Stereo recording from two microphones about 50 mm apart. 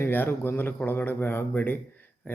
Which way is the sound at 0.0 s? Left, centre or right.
Left.